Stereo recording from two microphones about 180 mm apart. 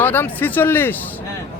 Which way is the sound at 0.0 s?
10° left (ahead or behind).